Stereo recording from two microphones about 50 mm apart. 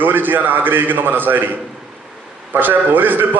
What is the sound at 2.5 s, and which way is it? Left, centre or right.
Speech, right.